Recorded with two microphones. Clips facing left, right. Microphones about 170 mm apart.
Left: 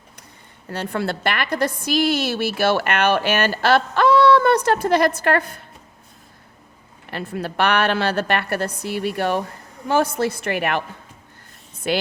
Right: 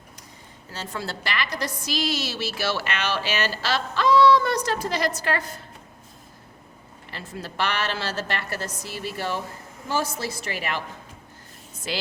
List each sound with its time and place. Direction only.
0.7 s a woman's voice: 60° left (ahead or behind)
7.1 s a woman's voice: 60° left (ahead or behind)
11.9 s a woman's voice: 55° left (ahead or behind)